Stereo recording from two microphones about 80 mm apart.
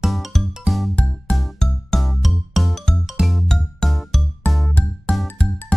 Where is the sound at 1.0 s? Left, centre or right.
Centre.